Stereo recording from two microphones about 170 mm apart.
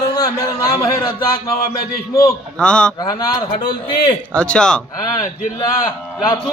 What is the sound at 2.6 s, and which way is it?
Speech, 5° left (ahead or behind).